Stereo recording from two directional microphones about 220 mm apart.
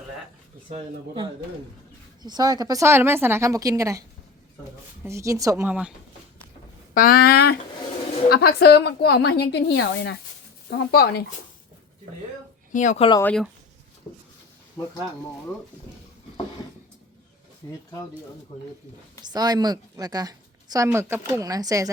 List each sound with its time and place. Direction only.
0.7 s speech: 25° right (ahead or behind)
5.0 s speech: 15° right (ahead or behind)
6.9 s a woman's voice: 40° left (ahead or behind)
12.7 s speech: 35° left (ahead or behind)
13.2 s speech: centre (ahead or behind)
14.8 s speech: 10° left (ahead or behind)
17.6 s speech: 20° left (ahead or behind)
19.2 s speech: 20° right (ahead or behind)